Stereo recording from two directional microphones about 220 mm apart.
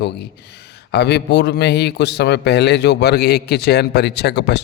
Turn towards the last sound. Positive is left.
turn(degrees=50)  # may be behind; listen again after turning